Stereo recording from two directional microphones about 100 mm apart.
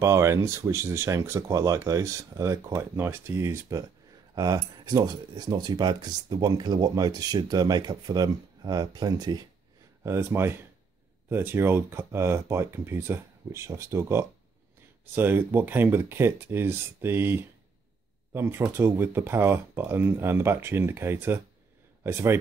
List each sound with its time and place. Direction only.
0.0 s speech: 30° right (ahead or behind)
4.4 s speech: 40° right (ahead or behind)
10.0 s speech: 25° right (ahead or behind)